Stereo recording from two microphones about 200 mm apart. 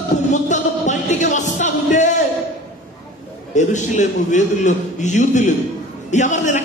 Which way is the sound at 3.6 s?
35° left (ahead or behind).